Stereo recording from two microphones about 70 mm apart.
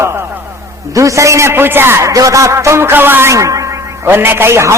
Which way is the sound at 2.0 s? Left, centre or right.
Right.